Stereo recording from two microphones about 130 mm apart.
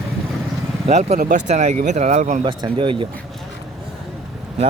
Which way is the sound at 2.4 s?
40° right (ahead or behind).